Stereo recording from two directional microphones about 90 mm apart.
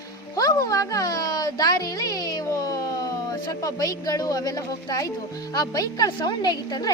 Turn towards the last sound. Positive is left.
turn(degrees=50)  # may be behind; listen again after turning